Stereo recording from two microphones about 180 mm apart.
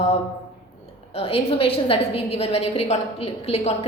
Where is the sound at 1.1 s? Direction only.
30° left (ahead or behind).